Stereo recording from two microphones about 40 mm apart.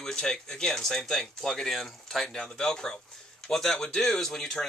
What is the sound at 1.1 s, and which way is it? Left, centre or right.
Speech, centre.